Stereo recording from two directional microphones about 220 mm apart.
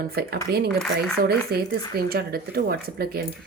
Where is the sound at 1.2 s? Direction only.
45° right (ahead or behind).